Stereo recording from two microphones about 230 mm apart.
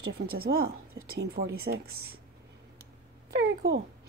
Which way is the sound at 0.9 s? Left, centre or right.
Right.